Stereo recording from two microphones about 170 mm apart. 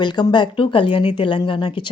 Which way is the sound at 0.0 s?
25° left (ahead or behind).